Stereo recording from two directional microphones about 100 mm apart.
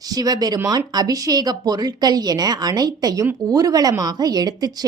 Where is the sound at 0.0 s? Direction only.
40° right (ahead or behind).